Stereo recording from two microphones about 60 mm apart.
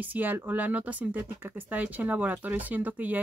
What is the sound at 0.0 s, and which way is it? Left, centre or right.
Speech, right.